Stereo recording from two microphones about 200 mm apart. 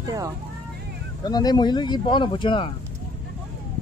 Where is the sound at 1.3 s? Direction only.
20° left (ahead or behind).